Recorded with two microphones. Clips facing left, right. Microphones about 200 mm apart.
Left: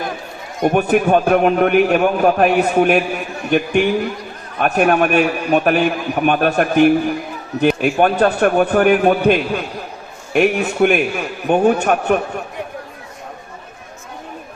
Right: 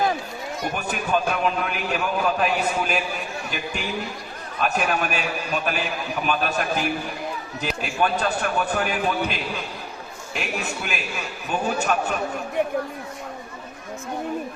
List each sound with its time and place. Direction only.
0.6 s a man's voice: 60° left (ahead or behind)